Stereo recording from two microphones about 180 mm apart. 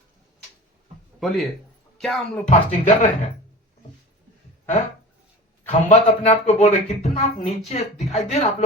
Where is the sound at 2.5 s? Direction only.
40° left (ahead or behind).